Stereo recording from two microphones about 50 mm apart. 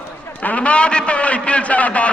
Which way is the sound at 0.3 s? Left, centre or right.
Left.